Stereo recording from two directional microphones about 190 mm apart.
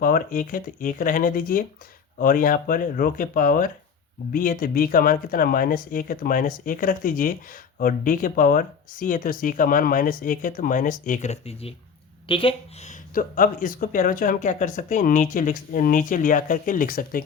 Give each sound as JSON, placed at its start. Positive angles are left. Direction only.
{"t": 0.0, "sound": "speech", "side_deg": 45}